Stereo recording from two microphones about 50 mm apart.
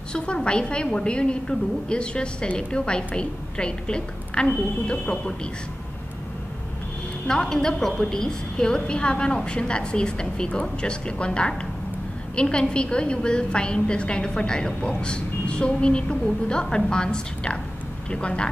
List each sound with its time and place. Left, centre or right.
0.1 s a woman's voice: centre
7.2 s a woman's voice: centre